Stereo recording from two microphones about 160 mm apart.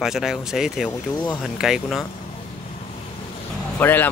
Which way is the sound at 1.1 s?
25° left (ahead or behind).